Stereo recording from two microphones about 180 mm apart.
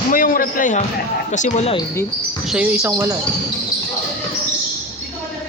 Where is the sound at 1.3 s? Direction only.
40° left (ahead or behind).